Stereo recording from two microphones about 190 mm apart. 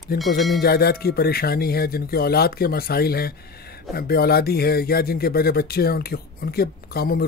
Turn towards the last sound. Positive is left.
turn(degrees=55)  # may be behind; listen again after turning